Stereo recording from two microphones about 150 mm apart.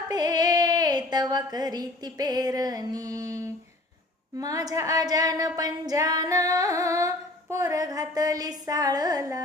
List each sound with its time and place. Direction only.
0.1 s female singing: 25° right (ahead or behind)